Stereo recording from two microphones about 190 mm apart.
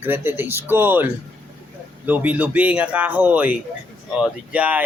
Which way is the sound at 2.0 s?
10° right (ahead or behind).